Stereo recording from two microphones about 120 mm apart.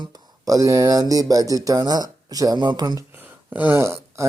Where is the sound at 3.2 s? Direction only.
15° right (ahead or behind).